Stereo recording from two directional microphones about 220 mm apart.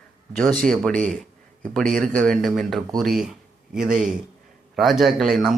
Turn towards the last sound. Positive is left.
turn(degrees=0)  # may be behind; listen again after turning